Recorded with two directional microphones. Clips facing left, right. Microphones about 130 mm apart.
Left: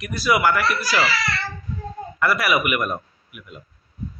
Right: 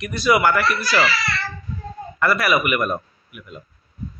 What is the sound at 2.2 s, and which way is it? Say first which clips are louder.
Speech: right 2 dB; 10° left (ahead or behind).